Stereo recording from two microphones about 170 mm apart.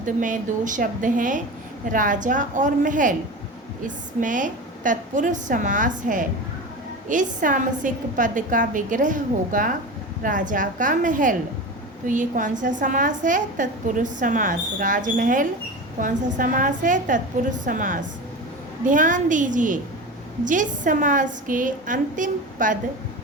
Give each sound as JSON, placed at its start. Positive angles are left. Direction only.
{"t": 0.0, "sound": "a woman's voice", "side_deg": -50}